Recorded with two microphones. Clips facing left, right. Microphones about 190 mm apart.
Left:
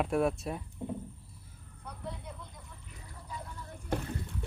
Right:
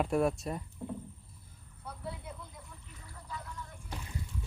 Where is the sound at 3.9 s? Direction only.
55° left (ahead or behind).